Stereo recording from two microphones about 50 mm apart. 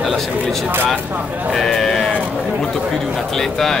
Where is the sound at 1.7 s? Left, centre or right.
Centre.